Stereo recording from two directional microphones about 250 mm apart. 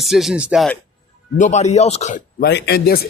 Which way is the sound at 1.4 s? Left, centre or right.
Left.